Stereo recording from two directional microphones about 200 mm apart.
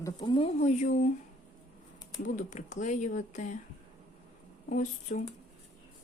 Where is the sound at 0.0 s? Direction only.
20° left (ahead or behind); by 1.0 s 40° left (ahead or behind).